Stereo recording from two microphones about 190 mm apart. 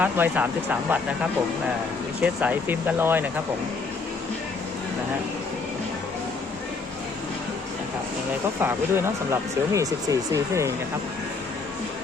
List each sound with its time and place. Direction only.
0.0 s speech: 10° right (ahead or behind)
2.2 s speech: 10° right (ahead or behind)
8.6 s speech: 15° right (ahead or behind)